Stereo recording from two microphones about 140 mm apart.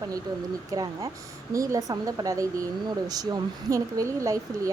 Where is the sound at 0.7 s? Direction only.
25° right (ahead or behind).